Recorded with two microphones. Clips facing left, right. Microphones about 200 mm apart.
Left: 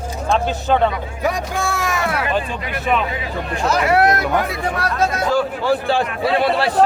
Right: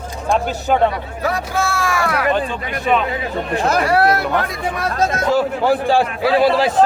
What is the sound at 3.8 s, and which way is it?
Speech, 20° left (ahead or behind).